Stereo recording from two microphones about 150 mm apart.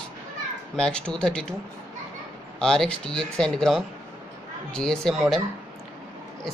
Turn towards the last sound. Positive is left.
turn(degrees=0)  # may be behind; listen again after turning